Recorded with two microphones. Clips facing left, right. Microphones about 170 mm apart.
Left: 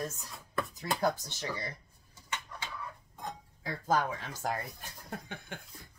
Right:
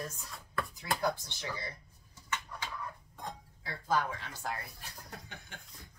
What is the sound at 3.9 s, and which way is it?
Speech, 45° left (ahead or behind).